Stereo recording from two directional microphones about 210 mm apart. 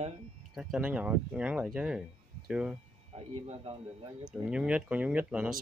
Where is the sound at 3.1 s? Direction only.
30° right (ahead or behind).